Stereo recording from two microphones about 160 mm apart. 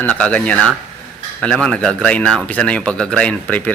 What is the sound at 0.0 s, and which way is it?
Speech, 10° left (ahead or behind).